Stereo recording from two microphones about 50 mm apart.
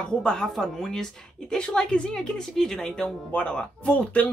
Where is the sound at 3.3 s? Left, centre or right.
Left.